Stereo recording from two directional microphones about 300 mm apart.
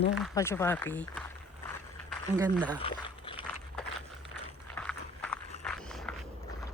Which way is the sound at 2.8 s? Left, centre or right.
Centre.